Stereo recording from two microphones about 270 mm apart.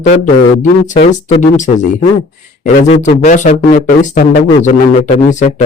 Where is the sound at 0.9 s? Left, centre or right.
Left.